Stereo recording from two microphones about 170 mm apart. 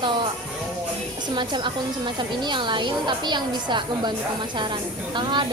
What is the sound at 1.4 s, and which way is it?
A woman's voice, 30° right (ahead or behind).